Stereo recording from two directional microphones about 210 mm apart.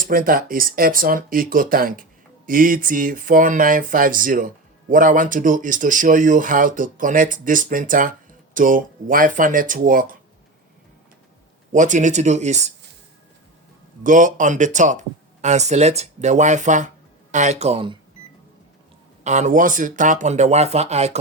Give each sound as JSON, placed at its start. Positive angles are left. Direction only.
{"t": 0.0, "sound": "speech", "side_deg": -40}
{"t": 11.7, "sound": "speech", "side_deg": -35}
{"t": 14.0, "sound": "speech", "side_deg": -40}
{"t": 19.2, "sound": "speech", "side_deg": -35}